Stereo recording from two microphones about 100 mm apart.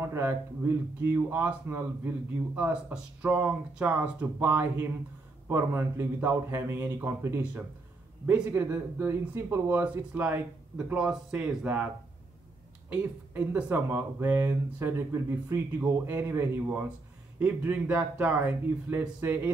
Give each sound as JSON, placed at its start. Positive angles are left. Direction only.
{"t": 0.0, "sound": "speech", "side_deg": -25}
{"t": 12.9, "sound": "speech", "side_deg": -15}